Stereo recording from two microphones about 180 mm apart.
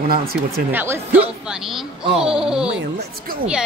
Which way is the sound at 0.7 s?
10° right (ahead or behind).